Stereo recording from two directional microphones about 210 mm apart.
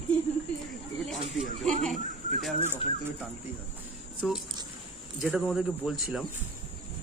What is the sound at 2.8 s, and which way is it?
Speech, 25° left (ahead or behind).